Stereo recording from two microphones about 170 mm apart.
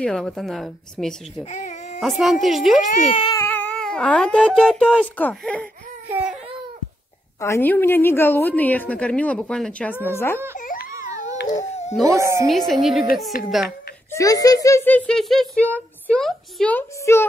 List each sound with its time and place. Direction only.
0.0 s a woman's voice: 5° left (ahead or behind)
1.4 s speech: 45° left (ahead or behind)
2.0 s a woman's voice: centre (ahead or behind)
2.9 s speech: 40° left (ahead or behind)
3.3 s cat: 10° left (ahead or behind)
4.6 s speech: 5° left (ahead or behind)
7.3 s speech: 15° left (ahead or behind)
10.9 s a sound: 20° right (ahead or behind)
11.7 s a sound: 40° left (ahead or behind)
12.1 s a woman's voice: 15° right (ahead or behind)
12.4 s a woman's voice: centre (ahead or behind)
14.1 s speech: 20° left (ahead or behind)